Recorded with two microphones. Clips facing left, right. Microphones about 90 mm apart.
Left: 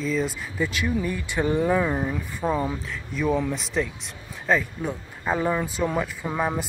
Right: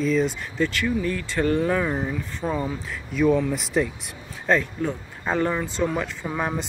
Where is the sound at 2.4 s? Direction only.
10° left (ahead or behind).